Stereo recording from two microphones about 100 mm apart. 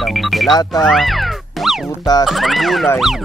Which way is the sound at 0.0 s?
Centre (ahead or behind).